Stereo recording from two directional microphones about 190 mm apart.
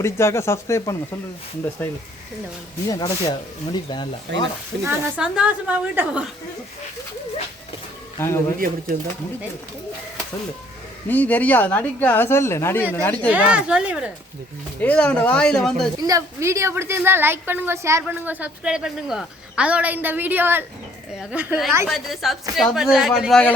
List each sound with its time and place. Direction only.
0.0 s speech: 15° left (ahead or behind)
2.8 s speech: 20° left (ahead or behind)
4.3 s speech: 70° right (ahead or behind)
4.8 s speech: 10° right (ahead or behind)
8.2 s speech: 15° left (ahead or behind)
11.1 s speech: 10° left (ahead or behind)
13.3 s speech: 5° right (ahead or behind)
14.8 s speech: 5° left (ahead or behind)
16.0 s speech: 20° right (ahead or behind); by 23.5 s centre (ahead or behind)